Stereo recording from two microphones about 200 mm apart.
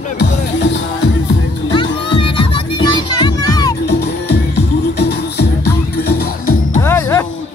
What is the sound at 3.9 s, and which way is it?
Music, 55° left (ahead or behind).